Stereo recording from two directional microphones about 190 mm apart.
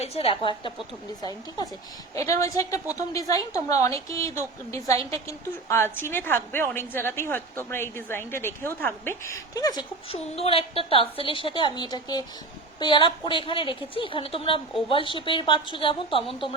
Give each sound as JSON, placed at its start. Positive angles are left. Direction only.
{"t": 0.0, "sound": "a woman's voice", "side_deg": 30}